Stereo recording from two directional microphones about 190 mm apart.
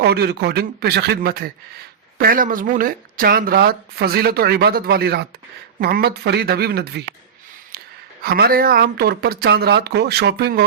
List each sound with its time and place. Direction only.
0.0 s speech: 60° right (ahead or behind)
8.2 s speech: 55° right (ahead or behind)